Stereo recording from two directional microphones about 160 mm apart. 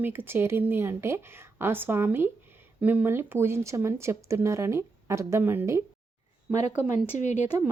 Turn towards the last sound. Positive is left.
turn(degrees=45)  # may be behind; listen again after turning